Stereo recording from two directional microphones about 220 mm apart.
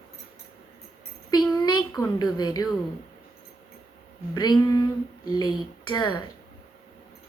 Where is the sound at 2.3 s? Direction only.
15° left (ahead or behind).